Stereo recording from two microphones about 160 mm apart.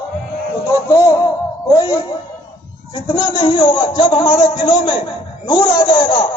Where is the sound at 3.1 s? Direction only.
25° left (ahead or behind).